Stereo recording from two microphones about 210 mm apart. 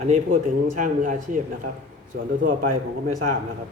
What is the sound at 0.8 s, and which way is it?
Speech, 40° right (ahead or behind).